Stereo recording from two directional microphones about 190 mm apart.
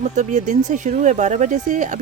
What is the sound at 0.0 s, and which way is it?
Speech, 40° right (ahead or behind).